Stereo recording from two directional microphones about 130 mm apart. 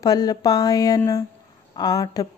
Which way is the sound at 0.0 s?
30° left (ahead or behind).